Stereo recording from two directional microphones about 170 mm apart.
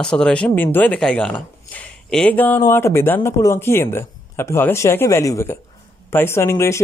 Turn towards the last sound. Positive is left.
turn(degrees=15)  # may be behind; listen again after turning